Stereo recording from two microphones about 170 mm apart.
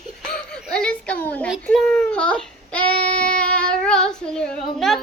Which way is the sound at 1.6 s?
5° left (ahead or behind).